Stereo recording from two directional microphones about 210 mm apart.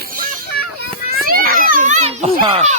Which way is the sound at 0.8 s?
45° right (ahead or behind).